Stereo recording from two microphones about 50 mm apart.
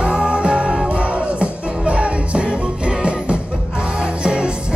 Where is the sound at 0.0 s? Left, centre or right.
Right.